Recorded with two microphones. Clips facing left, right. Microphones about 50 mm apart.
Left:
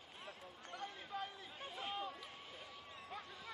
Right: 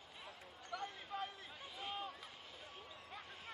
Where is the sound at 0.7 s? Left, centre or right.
Right.